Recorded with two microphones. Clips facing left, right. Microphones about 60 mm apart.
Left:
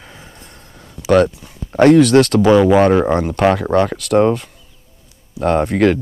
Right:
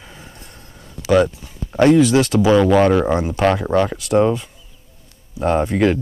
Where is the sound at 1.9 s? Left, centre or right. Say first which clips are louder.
Left 4 dB; left.